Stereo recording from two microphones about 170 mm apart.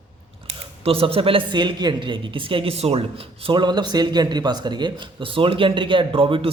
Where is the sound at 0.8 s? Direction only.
35° right (ahead or behind).